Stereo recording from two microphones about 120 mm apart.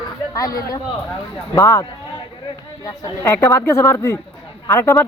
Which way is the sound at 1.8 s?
40° left (ahead or behind).